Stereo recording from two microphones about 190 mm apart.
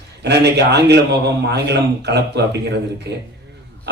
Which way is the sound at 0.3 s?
60° right (ahead or behind).